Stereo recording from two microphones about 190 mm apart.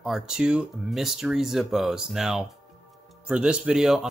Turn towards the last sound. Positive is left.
turn(degrees=0)  # may be behind; listen again after turning